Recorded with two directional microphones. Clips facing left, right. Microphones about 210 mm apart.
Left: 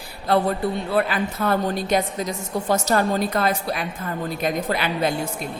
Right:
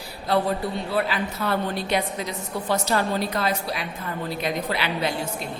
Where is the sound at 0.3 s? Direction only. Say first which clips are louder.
Left 3 dB; 55° left (ahead or behind).